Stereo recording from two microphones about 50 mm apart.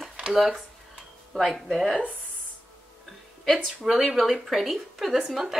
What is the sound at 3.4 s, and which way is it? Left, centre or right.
Speech, centre.